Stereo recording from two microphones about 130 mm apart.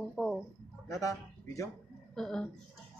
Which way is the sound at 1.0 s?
25° left (ahead or behind).